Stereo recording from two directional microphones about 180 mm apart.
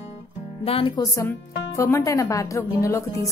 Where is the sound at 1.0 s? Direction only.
15° left (ahead or behind).